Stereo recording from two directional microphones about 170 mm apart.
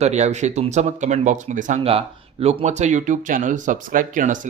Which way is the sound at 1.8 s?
35° right (ahead or behind).